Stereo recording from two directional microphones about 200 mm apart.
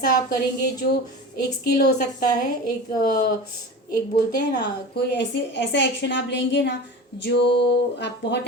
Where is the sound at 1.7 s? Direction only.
50° left (ahead or behind).